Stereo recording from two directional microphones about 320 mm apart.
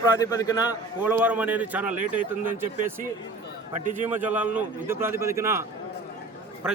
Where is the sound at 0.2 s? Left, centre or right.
Centre.